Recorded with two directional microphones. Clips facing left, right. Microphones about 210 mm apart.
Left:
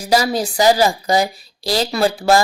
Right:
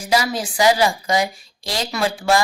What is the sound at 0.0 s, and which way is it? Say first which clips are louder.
Speech: left 4 dB; 40° left (ahead or behind).